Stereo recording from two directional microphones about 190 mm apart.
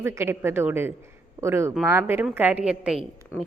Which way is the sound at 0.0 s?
15° right (ahead or behind).